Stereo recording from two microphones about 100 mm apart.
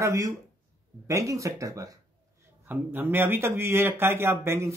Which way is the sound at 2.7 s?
20° right (ahead or behind).